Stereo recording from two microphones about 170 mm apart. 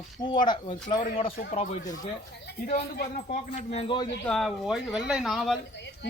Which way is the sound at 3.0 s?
40° left (ahead or behind).